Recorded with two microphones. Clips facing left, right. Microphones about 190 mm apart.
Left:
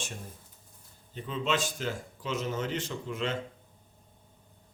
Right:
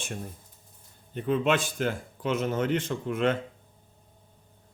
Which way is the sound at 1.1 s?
55° right (ahead or behind).